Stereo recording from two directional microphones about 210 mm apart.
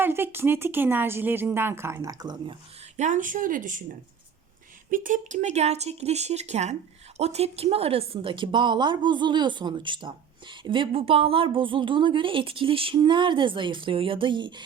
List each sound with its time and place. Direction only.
0.0 s speech: 10° right (ahead or behind)
3.0 s speech: 35° right (ahead or behind)
4.9 s a woman's voice: 40° right (ahead or behind); by 14.6 s 20° right (ahead or behind)